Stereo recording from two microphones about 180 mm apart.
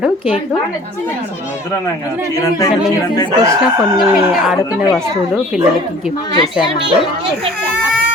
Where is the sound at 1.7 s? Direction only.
15° left (ahead or behind).